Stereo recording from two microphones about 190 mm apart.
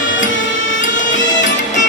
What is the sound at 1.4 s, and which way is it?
Music, 40° left (ahead or behind).